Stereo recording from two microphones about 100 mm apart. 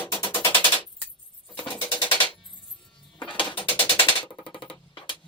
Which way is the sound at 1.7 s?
15° left (ahead or behind).